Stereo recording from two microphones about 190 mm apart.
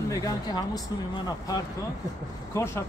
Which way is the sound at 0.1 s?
20° left (ahead or behind).